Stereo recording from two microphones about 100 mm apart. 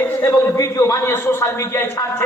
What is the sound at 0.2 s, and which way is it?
A man's voice, 35° left (ahead or behind).